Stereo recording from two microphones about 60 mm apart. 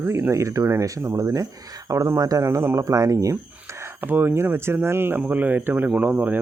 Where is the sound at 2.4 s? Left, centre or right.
Right.